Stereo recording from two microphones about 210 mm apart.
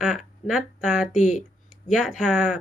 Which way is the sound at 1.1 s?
35° left (ahead or behind).